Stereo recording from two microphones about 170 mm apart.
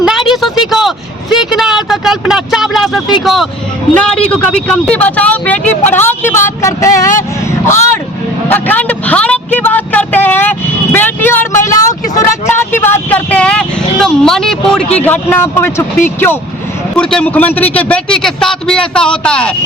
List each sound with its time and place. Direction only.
0.0 s a sound: centre (ahead or behind)
3.9 s speech: 5° left (ahead or behind)
8.4 s a man's voice: 10° left (ahead or behind)